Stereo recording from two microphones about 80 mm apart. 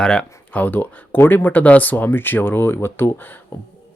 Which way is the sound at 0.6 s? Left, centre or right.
Left.